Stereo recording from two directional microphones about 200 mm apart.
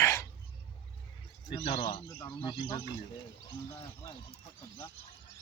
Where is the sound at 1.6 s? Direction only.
25° left (ahead or behind).